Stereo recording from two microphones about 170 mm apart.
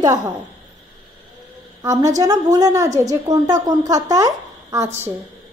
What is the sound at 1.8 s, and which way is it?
A woman's voice, 20° right (ahead or behind).